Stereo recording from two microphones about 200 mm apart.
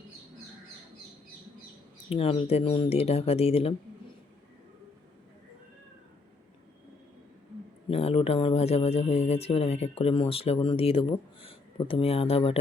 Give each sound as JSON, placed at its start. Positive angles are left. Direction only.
{"t": 2.0, "sound": "speech", "side_deg": 30}
{"t": 7.9, "sound": "speech", "side_deg": 30}